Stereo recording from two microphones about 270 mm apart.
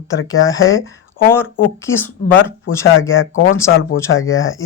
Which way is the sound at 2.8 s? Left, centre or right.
Left.